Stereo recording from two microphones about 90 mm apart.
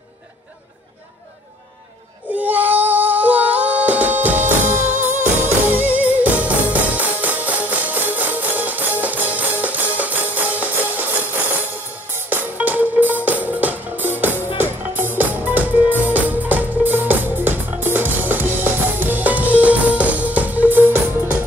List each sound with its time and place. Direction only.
2.3 s singing: 20° right (ahead or behind)
12.1 s music: 20° right (ahead or behind)